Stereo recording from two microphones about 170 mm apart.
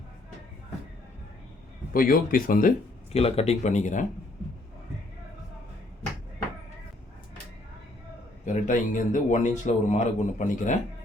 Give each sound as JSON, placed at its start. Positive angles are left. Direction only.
{"t": 1.9, "sound": "speech", "side_deg": 55}
{"t": 3.1, "sound": "speech", "side_deg": 35}
{"t": 8.4, "sound": "speech", "side_deg": 50}